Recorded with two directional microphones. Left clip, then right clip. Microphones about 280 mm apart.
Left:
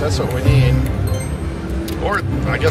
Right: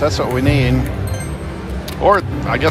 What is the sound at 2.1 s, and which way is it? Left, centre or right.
Speech, centre.